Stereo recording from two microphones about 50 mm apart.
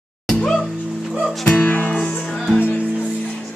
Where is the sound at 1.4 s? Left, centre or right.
Left.